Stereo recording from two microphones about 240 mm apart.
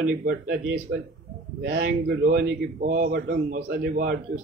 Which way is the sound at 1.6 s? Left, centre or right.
Right.